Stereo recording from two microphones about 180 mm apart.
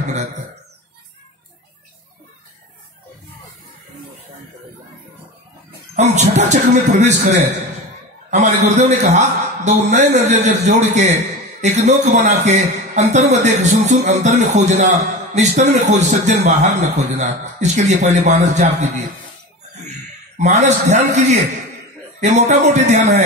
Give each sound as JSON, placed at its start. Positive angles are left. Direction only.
{"t": 5.9, "sound": "a man's voice", "side_deg": -40}
{"t": 20.3, "sound": "a man's voice", "side_deg": -40}